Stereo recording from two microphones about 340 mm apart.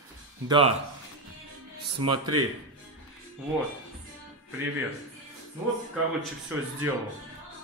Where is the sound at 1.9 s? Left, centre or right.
Right.